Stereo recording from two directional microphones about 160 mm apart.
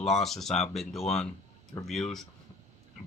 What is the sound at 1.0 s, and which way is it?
Speech, 40° left (ahead or behind).